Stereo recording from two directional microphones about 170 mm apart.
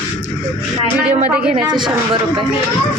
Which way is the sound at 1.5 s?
25° right (ahead or behind).